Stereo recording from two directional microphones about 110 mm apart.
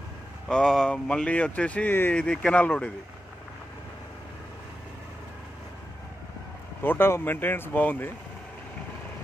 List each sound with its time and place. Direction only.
0.5 s speech: 5° left (ahead or behind)
6.8 s speech: 20° left (ahead or behind)